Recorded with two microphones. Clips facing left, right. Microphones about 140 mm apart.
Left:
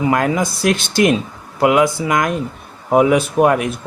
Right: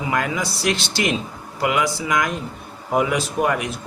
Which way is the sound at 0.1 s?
50° left (ahead or behind).